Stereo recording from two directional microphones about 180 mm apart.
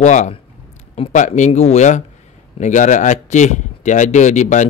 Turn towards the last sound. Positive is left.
turn(degrees=40)  # may be behind; listen again after turning